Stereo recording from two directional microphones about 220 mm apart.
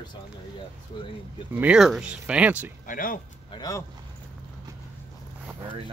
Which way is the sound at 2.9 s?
40° left (ahead or behind).